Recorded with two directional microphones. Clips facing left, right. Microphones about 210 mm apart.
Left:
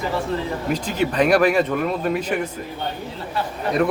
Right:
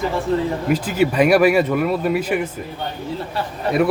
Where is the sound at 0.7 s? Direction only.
10° right (ahead or behind).